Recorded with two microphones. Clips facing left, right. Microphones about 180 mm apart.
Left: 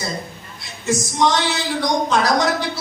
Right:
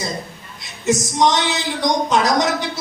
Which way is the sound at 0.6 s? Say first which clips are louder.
Right 3 dB; 20° right (ahead or behind).